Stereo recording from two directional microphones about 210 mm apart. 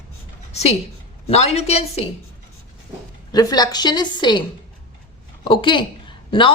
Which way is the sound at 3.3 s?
20° left (ahead or behind).